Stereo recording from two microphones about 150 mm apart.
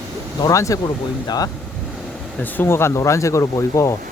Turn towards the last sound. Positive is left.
turn(degrees=20)  # may be behind; listen again after turning